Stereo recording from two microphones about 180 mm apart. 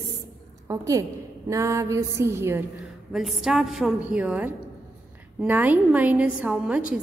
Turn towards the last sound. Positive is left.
turn(degrees=-5)  # may be behind; listen again after turning